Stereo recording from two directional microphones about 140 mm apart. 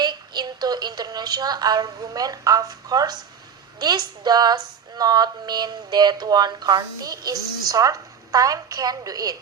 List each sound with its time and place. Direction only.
0.0 s speech: 30° right (ahead or behind)